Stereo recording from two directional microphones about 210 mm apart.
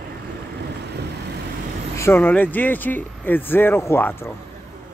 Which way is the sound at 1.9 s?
10° left (ahead or behind).